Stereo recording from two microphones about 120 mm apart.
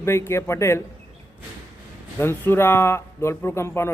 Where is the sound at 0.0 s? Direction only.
20° left (ahead or behind).